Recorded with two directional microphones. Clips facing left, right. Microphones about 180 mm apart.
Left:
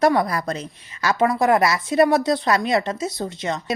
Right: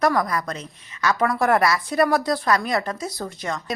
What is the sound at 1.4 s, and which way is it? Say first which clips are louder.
Speech: left 1 dB; 20° left (ahead or behind).